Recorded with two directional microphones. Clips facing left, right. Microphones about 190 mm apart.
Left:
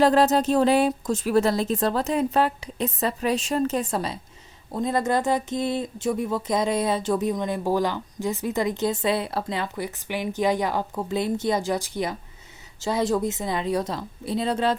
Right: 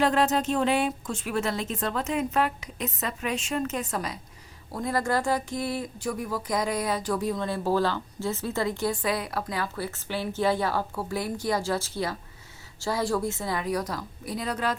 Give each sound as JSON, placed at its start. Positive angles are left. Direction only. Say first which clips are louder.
{"t": 0.0, "sound": "speech", "louder": "left 5 dB", "side_deg": 35}